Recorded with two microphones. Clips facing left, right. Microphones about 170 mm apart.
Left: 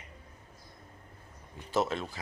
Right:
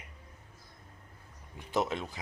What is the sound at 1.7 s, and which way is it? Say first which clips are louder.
Speech: left 1 dB; 15° right (ahead or behind).